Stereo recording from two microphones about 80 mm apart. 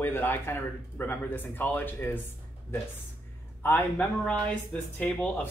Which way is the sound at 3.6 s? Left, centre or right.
Left.